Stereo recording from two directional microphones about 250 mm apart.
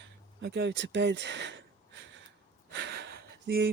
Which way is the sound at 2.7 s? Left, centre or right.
Right.